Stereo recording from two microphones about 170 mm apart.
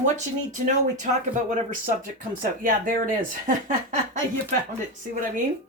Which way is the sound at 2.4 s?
55° right (ahead or behind).